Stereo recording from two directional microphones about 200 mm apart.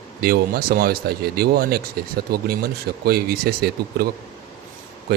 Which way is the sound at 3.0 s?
50° right (ahead or behind).